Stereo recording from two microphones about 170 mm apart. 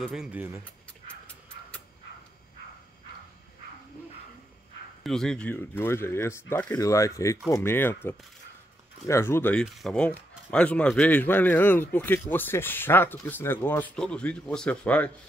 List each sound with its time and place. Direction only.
0.0 s speech: 5° right (ahead or behind)
5.0 s speech: centre (ahead or behind)